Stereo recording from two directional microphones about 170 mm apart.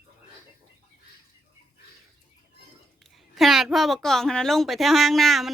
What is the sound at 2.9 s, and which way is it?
A woman's voice, centre (ahead or behind).